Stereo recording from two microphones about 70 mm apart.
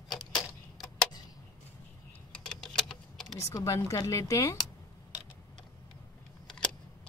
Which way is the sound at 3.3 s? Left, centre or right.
Left.